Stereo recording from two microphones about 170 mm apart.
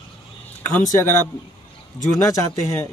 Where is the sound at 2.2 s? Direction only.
20° left (ahead or behind).